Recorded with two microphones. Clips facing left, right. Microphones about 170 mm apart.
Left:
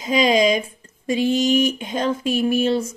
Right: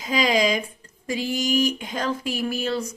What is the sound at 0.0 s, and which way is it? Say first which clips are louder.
Speech: left 4 dB; 20° left (ahead or behind).